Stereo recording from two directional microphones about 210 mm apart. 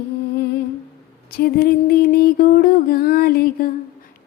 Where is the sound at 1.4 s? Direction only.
45° left (ahead or behind).